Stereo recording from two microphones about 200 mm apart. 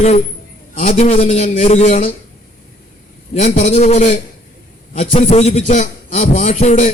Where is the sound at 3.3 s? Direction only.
35° left (ahead or behind).